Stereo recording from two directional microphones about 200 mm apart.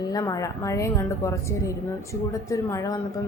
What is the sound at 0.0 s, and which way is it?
A woman's voice, 20° left (ahead or behind).